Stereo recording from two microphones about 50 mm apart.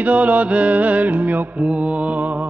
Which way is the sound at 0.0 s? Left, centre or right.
Right.